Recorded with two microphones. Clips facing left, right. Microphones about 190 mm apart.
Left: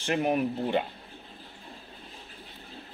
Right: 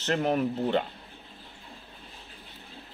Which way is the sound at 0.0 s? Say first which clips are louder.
Even; 10° left (ahead or behind).